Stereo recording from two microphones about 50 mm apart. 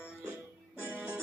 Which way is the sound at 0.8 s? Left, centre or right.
Right.